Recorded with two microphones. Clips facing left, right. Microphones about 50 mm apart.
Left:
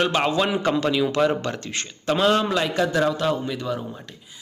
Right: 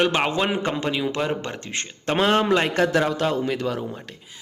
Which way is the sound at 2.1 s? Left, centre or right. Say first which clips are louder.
Right 1 dB; right.